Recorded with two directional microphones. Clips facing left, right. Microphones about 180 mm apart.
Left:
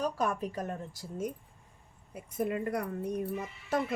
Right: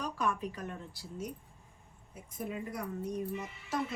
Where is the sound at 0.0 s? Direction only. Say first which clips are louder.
Left 3 dB; 40° left (ahead or behind).